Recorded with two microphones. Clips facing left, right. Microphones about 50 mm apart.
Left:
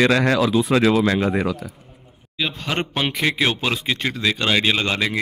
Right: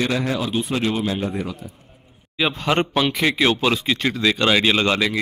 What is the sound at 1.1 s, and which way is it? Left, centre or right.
Speech, left.